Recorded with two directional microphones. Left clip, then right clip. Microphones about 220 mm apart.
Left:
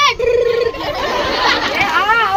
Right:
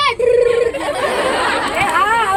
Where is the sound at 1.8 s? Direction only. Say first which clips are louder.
Even; 10° right (ahead or behind).